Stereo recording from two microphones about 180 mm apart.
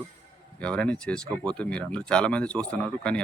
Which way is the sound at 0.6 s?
5° left (ahead or behind).